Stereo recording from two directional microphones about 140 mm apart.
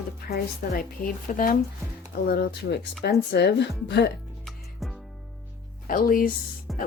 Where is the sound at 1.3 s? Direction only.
70° left (ahead or behind).